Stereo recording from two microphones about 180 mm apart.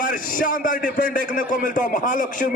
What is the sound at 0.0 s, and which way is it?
A man's voice, 50° left (ahead or behind).